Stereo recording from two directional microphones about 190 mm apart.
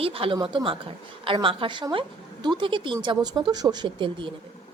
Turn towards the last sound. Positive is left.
turn(degrees=-25)  # may be behind; listen again after turning